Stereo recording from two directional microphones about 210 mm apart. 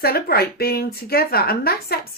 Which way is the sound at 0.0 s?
45° left (ahead or behind).